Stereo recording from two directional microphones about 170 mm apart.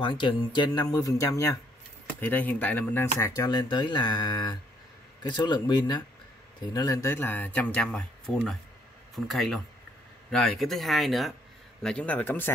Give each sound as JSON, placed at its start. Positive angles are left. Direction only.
{"t": 0.0, "sound": "speech", "side_deg": 30}